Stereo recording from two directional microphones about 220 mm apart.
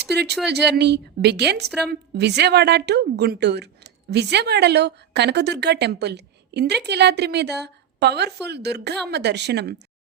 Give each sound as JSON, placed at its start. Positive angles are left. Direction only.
{"t": 0.4, "sound": "a woman's voice", "side_deg": -50}